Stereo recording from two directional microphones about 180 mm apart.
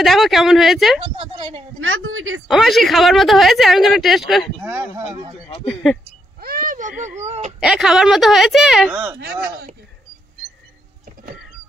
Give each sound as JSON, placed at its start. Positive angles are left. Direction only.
{"t": 0.0, "sound": "speech", "side_deg": 0}
{"t": 1.2, "sound": "a woman's voice", "side_deg": -30}
{"t": 1.8, "sound": "a woman's voice", "side_deg": -90}
{"t": 2.4, "sound": "speech", "side_deg": 0}
{"t": 5.7, "sound": "speech", "side_deg": 5}
{"t": 6.4, "sound": "a sound", "side_deg": -50}
{"t": 7.6, "sound": "speech", "side_deg": -5}